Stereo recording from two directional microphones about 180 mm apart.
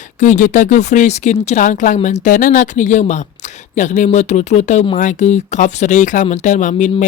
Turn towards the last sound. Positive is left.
turn(degrees=40)  # may be behind; listen again after turning